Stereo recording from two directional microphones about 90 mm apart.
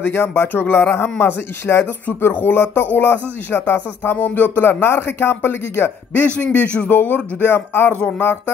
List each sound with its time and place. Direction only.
0.0 s speech: 25° left (ahead or behind)
6.4 s speech: 15° left (ahead or behind)